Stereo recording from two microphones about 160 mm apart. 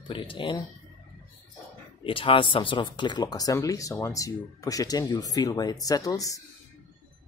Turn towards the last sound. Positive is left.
turn(degrees=20)  # may be behind; listen again after turning